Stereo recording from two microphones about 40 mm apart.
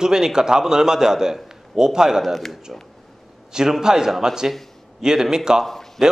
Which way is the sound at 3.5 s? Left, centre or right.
Centre.